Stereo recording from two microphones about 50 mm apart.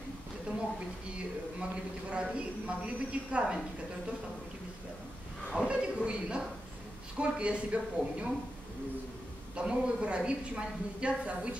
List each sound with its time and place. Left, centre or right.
2.0 s a woman's voice: right
5.6 s a sound: centre
7.2 s a woman's voice: right
9.6 s a woman's voice: right